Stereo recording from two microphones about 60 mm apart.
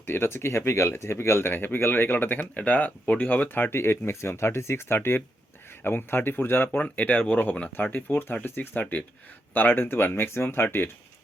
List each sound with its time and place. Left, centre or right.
0.0 s speech: left
6.7 s speech: left